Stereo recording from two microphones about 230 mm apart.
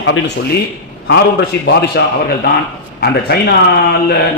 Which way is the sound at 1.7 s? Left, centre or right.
Left.